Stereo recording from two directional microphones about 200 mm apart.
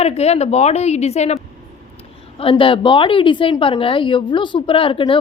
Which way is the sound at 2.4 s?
25° left (ahead or behind).